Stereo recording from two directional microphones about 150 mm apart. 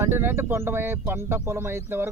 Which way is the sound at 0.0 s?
15° right (ahead or behind).